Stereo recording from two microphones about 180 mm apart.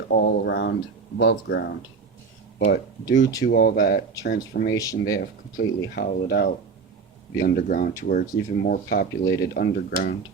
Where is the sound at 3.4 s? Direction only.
75° left (ahead or behind).